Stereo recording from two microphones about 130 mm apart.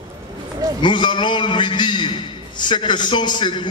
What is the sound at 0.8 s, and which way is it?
A man's voice, 35° left (ahead or behind).